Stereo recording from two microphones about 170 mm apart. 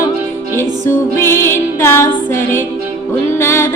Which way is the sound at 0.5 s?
15° left (ahead or behind).